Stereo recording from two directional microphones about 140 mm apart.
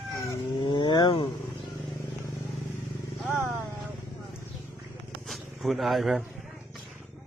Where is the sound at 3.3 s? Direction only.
20° right (ahead or behind).